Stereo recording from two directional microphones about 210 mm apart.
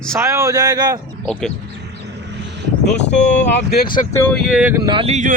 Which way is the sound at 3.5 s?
55° left (ahead or behind).